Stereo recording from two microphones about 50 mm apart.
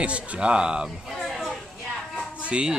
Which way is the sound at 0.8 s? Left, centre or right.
Centre.